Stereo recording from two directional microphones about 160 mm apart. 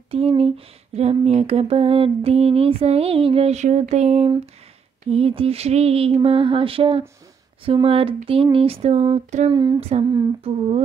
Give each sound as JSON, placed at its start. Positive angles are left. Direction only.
{"t": 0.1, "sound": "speech", "side_deg": -35}
{"t": 9.5, "sound": "a sound", "side_deg": -25}
{"t": 9.8, "sound": "speech", "side_deg": -40}